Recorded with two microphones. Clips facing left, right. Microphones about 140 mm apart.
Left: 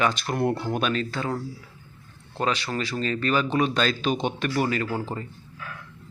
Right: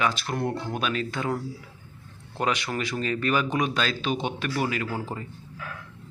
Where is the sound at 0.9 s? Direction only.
15° right (ahead or behind).